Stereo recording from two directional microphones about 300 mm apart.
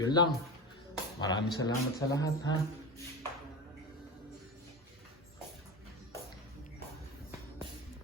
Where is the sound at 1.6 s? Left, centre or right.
Centre.